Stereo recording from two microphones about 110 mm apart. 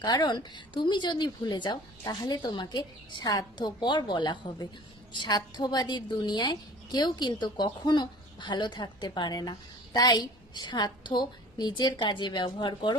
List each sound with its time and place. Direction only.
0.0 s a woman's voice: 40° left (ahead or behind)